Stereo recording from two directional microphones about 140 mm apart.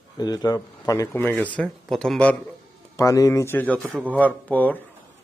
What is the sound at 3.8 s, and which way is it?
Speech, 15° right (ahead or behind).